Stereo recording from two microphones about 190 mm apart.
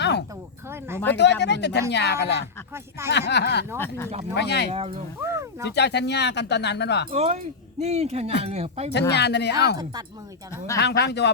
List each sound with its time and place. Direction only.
0.0 s a sound: 60° left (ahead or behind)
0.7 s speech: 10° right (ahead or behind)
1.1 s speech: 65° left (ahead or behind)
3.8 s speech: 10° left (ahead or behind)
4.4 s speech: 60° left (ahead or behind)
4.7 s speech: 30° right (ahead or behind)
5.2 s speech: 15° right (ahead or behind)
5.6 s speech: 60° left (ahead or behind)
7.1 s speech: 35° right (ahead or behind)
9.1 s speech: 60° left (ahead or behind)
10.8 s speech: 60° left (ahead or behind)